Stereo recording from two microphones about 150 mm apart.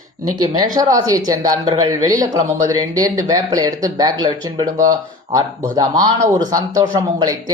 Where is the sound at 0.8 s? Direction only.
25° right (ahead or behind).